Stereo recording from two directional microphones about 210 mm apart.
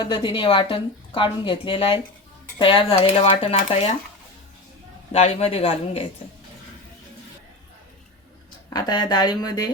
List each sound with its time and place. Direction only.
0.0 s a woman's voice: 20° left (ahead or behind)
5.1 s a woman's voice: 30° left (ahead or behind)
8.7 s a woman's voice: 20° left (ahead or behind)